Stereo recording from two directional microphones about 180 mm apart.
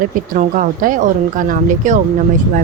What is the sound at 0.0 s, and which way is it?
Speech, 50° right (ahead or behind).